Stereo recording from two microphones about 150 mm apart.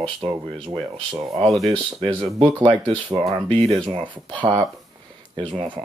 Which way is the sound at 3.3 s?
5° left (ahead or behind).